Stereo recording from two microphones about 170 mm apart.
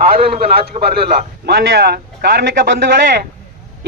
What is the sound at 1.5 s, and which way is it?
A man's voice, 70° right (ahead or behind).